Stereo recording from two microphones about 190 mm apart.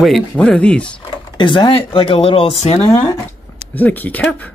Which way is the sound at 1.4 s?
25° left (ahead or behind).